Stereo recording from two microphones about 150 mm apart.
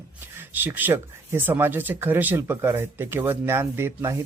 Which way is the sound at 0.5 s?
15° right (ahead or behind).